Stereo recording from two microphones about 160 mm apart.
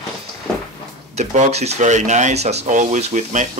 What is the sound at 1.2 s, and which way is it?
Speech, 45° right (ahead or behind).